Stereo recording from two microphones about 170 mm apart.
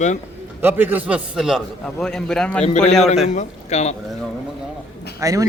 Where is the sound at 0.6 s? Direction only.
10° right (ahead or behind); by 2.6 s 5° left (ahead or behind).